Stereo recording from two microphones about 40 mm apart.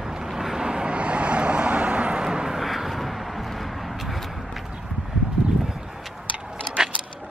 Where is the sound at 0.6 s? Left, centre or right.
Right.